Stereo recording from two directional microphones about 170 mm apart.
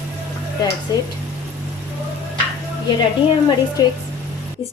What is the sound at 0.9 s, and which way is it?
Speech, 25° left (ahead or behind).